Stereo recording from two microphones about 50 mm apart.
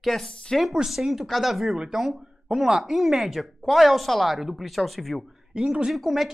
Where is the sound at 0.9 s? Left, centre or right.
Centre.